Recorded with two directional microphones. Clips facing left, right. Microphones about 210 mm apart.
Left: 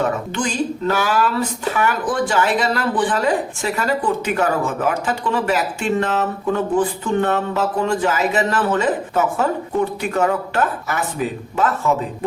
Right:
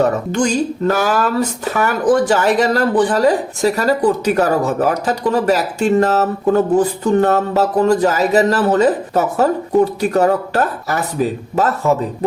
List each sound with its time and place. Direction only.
0.0 s speech: 40° right (ahead or behind)